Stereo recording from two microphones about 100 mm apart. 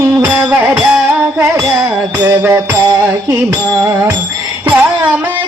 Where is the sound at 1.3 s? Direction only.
30° right (ahead or behind).